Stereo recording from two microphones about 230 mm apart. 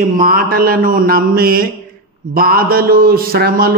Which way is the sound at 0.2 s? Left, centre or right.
Right.